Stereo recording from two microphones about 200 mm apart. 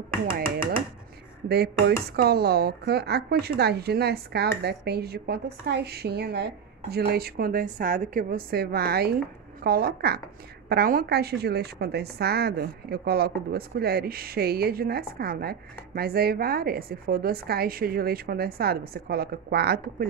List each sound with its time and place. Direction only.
1.5 s a woman's voice: 55° right (ahead or behind)